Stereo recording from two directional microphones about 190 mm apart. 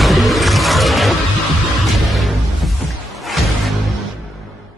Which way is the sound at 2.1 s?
Centre (ahead or behind).